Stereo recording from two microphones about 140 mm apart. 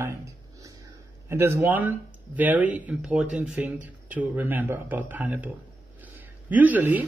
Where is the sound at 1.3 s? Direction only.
20° right (ahead or behind).